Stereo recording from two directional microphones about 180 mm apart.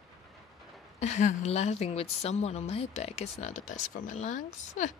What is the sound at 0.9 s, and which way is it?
A woman's voice, 40° left (ahead or behind).